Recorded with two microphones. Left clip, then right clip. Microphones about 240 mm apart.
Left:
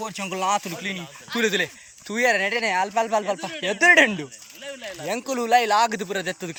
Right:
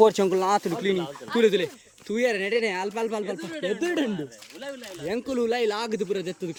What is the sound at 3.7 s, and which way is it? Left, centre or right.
Speech, left.